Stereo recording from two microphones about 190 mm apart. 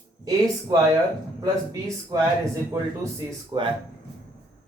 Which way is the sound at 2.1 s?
20° right (ahead or behind).